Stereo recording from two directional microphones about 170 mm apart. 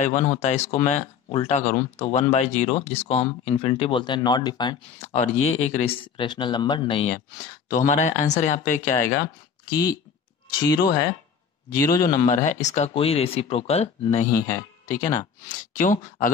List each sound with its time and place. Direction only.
0.0 s speech: 45° left (ahead or behind); by 4.7 s 25° left (ahead or behind)
5.0 s speech: 40° left (ahead or behind)
7.7 s speech: 50° left (ahead or behind)
9.7 s a man's voice: 20° left (ahead or behind)
11.7 s a man's voice: 20° left (ahead or behind)
12.3 s speech: 45° left (ahead or behind)
14.3 s speech: 15° left (ahead or behind)
15.4 s speech: 50° left (ahead or behind)